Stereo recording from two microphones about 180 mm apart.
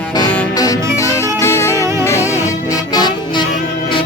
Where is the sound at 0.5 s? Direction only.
20° left (ahead or behind).